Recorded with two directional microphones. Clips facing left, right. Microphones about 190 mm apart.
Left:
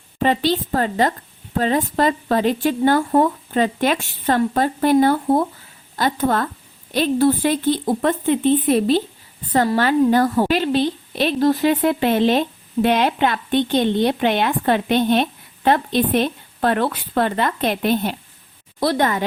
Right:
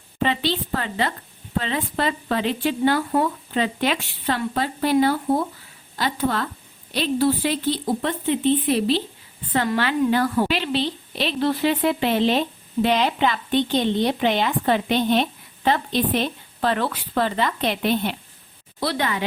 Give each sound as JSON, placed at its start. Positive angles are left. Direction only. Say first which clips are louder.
{"t": 0.2, "sound": "a woman's voice", "louder": "left 5 dB", "side_deg": 45}